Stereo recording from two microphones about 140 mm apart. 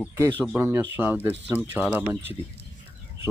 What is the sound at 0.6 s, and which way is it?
Speech, 15° right (ahead or behind).